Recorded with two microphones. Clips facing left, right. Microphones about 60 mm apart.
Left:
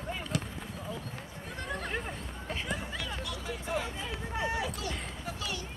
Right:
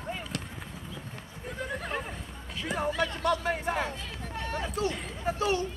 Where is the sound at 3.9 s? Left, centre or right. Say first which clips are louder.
Left 3 dB; centre.